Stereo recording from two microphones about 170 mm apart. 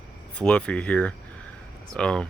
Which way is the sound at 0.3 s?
5° left (ahead or behind).